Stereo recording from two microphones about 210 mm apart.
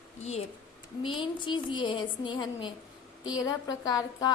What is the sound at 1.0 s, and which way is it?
A woman's voice, 25° left (ahead or behind).